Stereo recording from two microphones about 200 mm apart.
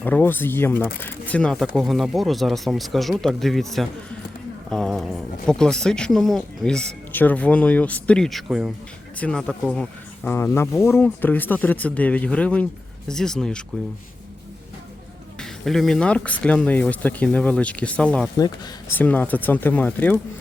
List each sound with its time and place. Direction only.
0.0 s speech: 10° left (ahead or behind)
15.4 s speech: centre (ahead or behind)